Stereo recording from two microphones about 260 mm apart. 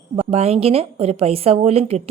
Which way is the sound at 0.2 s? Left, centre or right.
Right.